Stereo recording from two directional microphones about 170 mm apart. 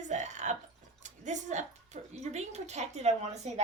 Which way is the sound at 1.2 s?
45° right (ahead or behind).